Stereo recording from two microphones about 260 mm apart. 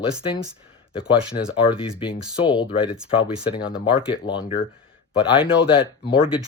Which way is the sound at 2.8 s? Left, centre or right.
Centre.